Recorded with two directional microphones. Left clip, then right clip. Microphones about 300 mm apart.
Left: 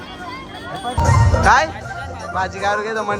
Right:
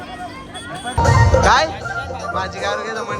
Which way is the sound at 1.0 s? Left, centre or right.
Right.